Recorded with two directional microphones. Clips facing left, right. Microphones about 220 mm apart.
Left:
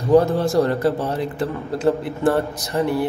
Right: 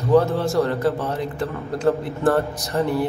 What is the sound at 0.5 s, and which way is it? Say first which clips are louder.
Speech: left 2 dB; 35° left (ahead or behind).